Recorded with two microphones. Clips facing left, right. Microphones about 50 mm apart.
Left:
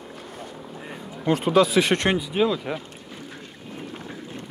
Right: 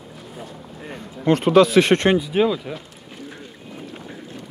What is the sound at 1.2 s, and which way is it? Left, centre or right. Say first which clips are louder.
Speech: right 5 dB; right.